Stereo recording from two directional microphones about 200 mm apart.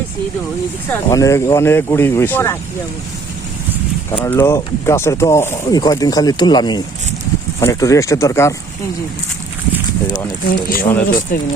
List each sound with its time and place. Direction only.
0.9 s speech: 15° left (ahead or behind)
4.1 s speech: 10° left (ahead or behind)
10.4 s speech: 45° left (ahead or behind)